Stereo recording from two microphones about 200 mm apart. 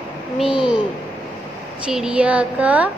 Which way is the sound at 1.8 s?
5° right (ahead or behind).